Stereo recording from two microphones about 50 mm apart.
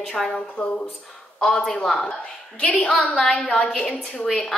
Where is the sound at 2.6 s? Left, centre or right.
Left.